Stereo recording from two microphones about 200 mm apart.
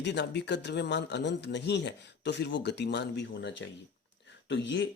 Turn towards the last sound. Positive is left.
turn(degrees=60)  # may be behind; listen again after turning